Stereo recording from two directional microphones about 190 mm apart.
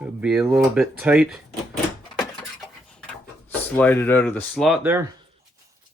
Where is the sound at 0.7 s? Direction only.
5° right (ahead or behind).